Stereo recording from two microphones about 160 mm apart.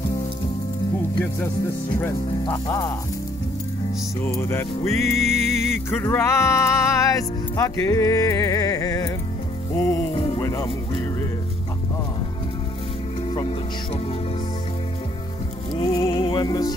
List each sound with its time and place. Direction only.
2.0 s music: 15° left (ahead or behind)
2.5 s speech: 20° left (ahead or behind)
4.2 s music: 15° left (ahead or behind)
5.3 s music: 45° right (ahead or behind)
5.9 s speech: 15° left (ahead or behind)
10.1 s music: 35° left (ahead or behind)
10.4 s music: 20° left (ahead or behind)
15.7 s speech: 25° left (ahead or behind)